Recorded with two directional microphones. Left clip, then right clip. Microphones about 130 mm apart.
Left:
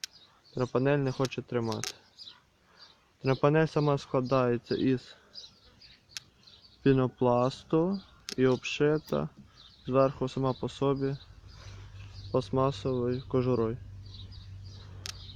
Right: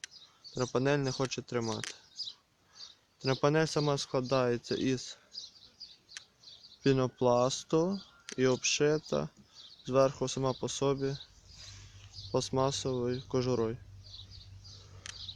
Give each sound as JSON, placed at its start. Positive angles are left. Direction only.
{"t": 0.6, "sound": "speech", "side_deg": -10}
{"t": 3.2, "sound": "speech", "side_deg": 0}
{"t": 6.8, "sound": "speech", "side_deg": -15}
{"t": 12.3, "sound": "speech", "side_deg": -15}